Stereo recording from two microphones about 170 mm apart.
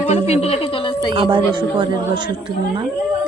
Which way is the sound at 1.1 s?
30° right (ahead or behind).